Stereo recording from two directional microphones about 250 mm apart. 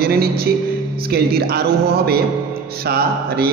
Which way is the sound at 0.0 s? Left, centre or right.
Right.